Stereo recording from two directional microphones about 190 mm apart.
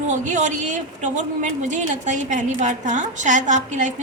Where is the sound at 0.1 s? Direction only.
40° right (ahead or behind).